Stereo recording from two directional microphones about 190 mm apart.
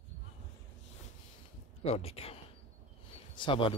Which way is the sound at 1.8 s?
30° left (ahead or behind).